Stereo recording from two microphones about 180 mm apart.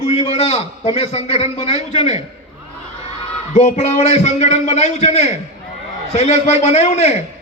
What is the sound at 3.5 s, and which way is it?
A man's voice, 40° left (ahead or behind).